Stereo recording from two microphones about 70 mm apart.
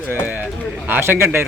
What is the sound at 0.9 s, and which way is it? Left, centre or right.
Speech, right.